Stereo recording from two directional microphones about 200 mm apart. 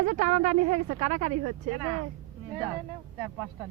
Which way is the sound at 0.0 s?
35° right (ahead or behind).